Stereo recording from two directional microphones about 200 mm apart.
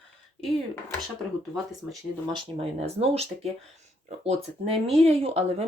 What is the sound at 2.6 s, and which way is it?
Speech, 30° right (ahead or behind).